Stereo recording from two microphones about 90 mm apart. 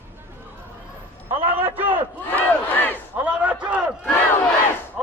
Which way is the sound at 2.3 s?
20° left (ahead or behind).